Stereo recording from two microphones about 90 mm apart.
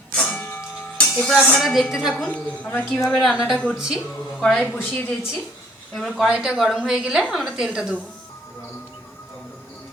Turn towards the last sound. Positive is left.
turn(degrees=-10)  # may be behind; listen again after turning